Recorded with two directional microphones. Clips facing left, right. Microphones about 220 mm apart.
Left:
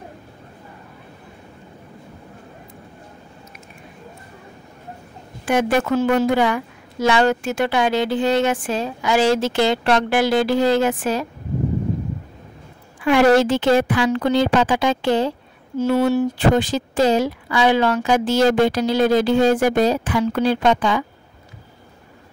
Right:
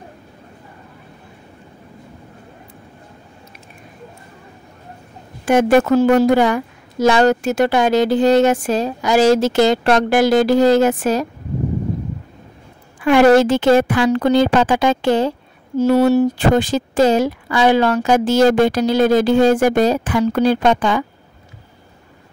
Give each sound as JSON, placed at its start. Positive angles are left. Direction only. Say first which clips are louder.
{"t": 5.4, "sound": "a woman's voice", "louder": "right 6 dB", "side_deg": -45}
{"t": 13.0, "sound": "speech", "louder": "right 3 dB", "side_deg": -45}